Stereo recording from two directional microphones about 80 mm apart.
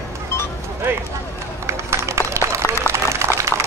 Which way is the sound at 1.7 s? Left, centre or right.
Right.